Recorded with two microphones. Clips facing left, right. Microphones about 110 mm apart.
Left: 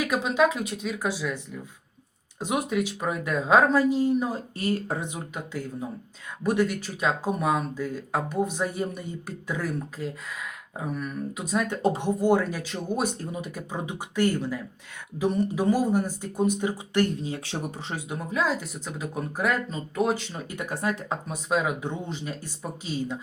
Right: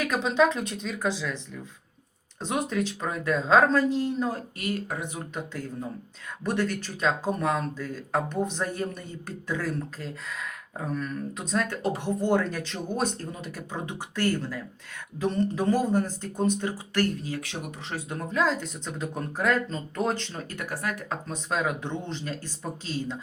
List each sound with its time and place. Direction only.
0.0 s speech: 5° left (ahead or behind)
2.4 s speech: 10° left (ahead or behind)
4.5 s speech: 30° left (ahead or behind)
5.0 s speech: 10° left (ahead or behind); by 17.9 s 30° left (ahead or behind)
17.9 s speech: 10° left (ahead or behind)
20.6 s speech: 20° left (ahead or behind)
21.2 s speech: 10° left (ahead or behind)